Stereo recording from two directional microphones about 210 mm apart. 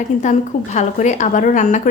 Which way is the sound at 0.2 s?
35° left (ahead or behind).